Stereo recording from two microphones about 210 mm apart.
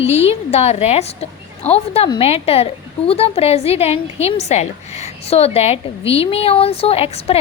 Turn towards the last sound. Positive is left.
turn(degrees=30)  # may be behind; listen again after turning